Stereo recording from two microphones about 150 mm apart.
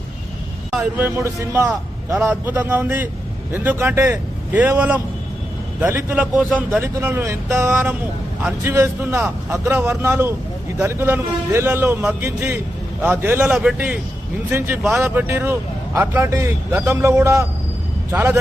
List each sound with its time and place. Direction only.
0.9 s a man's voice: 15° right (ahead or behind)
2.1 s a man's voice: 10° right (ahead or behind)